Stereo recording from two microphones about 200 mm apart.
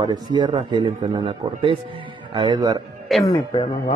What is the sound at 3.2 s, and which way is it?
Speech, 20° left (ahead or behind).